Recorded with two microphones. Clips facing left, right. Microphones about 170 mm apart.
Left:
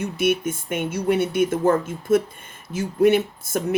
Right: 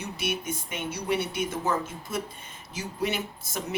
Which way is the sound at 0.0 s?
50° left (ahead or behind).